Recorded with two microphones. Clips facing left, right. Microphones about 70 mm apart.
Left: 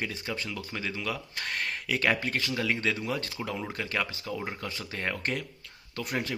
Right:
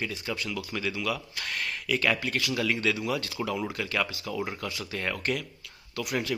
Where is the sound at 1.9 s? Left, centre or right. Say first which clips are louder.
Right 1 dB; left.